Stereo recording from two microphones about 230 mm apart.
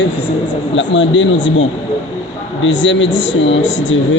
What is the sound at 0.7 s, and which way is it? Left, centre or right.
A man's voice, left.